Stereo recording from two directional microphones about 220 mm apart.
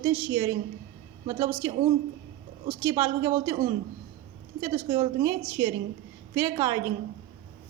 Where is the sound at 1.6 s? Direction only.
15° right (ahead or behind).